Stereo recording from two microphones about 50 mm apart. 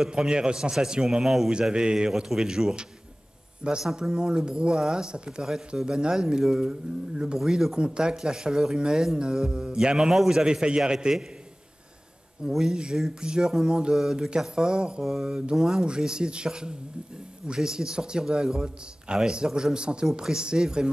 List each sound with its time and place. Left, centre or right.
0.0 s a man's voice: centre
1.5 s a man's voice: centre
3.9 s a man's voice: centre
9.9 s a man's voice: centre
12.4 s a man's voice: centre